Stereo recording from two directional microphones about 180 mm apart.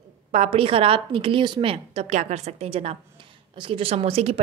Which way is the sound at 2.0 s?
40° right (ahead or behind).